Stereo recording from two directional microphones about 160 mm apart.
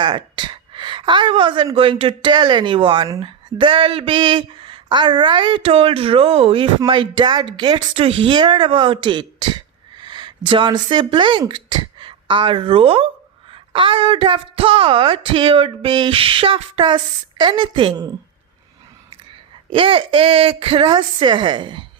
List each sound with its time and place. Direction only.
0.0 s a woman's voice: 30° right (ahead or behind)
19.7 s speech: 35° right (ahead or behind)